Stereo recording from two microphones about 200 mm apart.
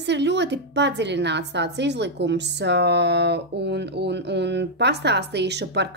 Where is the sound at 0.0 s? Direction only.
60° right (ahead or behind).